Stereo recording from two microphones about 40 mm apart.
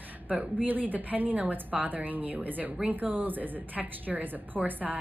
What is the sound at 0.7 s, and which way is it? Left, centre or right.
A woman's voice, right.